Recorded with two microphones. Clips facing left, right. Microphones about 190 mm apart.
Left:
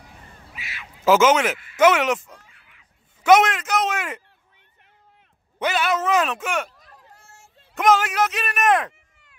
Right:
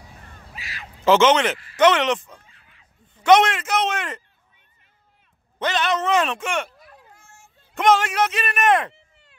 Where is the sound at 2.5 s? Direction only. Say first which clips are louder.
Even; 30° right (ahead or behind).